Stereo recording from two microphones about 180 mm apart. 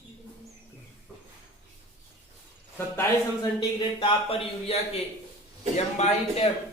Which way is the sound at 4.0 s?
30° left (ahead or behind).